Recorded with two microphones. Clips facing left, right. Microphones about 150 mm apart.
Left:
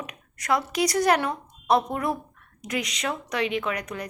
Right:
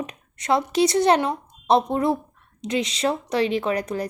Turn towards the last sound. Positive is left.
turn(degrees=-35)  # may be behind; listen again after turning